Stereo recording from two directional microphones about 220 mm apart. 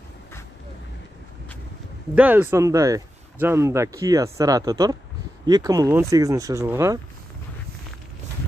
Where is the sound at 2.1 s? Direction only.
5° right (ahead or behind).